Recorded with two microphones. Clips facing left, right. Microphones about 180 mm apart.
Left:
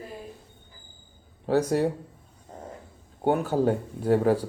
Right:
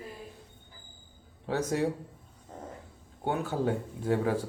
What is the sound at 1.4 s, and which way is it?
Speech, 40° left (ahead or behind).